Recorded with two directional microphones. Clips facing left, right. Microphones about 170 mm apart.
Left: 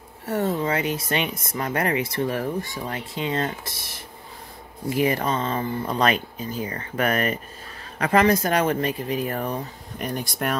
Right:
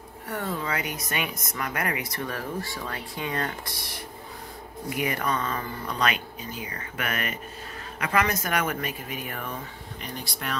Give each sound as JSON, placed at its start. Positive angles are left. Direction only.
{"t": 0.3, "sound": "speech", "side_deg": 25}